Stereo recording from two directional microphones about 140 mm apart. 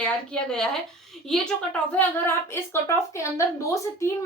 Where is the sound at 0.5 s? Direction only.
5° left (ahead or behind).